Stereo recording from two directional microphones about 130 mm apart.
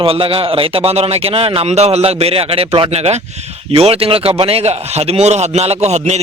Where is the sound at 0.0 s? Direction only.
45° right (ahead or behind).